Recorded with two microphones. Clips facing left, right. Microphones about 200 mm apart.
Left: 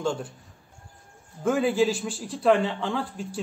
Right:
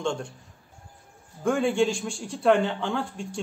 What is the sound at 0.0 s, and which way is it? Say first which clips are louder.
Speech: left 1 dB; 5° left (ahead or behind).